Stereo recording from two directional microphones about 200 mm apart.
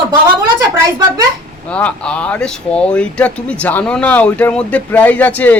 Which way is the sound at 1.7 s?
5° left (ahead or behind).